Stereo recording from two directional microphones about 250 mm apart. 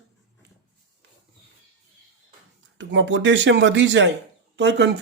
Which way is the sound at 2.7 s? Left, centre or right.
Right.